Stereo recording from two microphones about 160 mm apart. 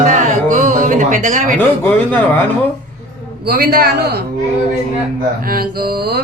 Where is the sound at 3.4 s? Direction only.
70° right (ahead or behind).